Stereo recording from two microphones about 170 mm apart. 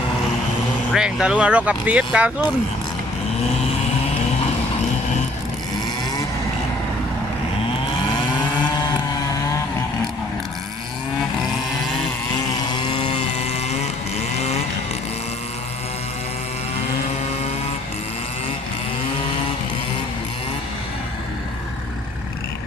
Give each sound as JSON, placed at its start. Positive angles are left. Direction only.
{"t": 0.9, "sound": "speech", "side_deg": -5}
{"t": 12.5, "sound": "vehicle", "side_deg": 25}